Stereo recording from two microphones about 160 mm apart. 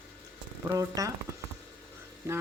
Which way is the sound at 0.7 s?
20° right (ahead or behind).